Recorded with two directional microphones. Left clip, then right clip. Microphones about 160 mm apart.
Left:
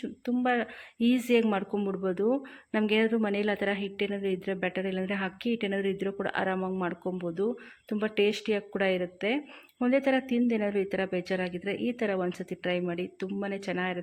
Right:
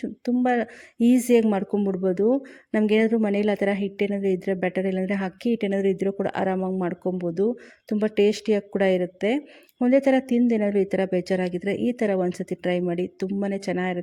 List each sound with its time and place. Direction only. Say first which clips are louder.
0.0 s a woman's voice: right 5 dB; 50° right (ahead or behind)